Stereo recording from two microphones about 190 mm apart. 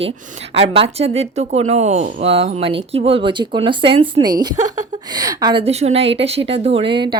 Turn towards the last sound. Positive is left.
turn(degrees=-25)  # may be behind; listen again after turning